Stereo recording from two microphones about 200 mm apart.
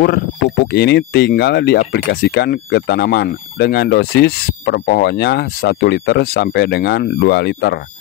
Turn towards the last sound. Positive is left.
turn(degrees=55)  # may be behind; listen again after turning